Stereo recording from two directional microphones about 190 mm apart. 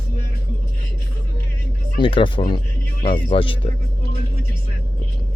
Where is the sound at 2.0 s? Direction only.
25° left (ahead or behind).